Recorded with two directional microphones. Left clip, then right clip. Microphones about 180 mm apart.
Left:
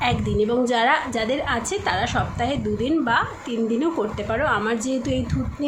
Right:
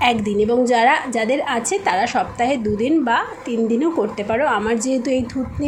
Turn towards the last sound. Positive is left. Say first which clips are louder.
# right 5 dB
turn(degrees=-15)  # may be behind; listen again after turning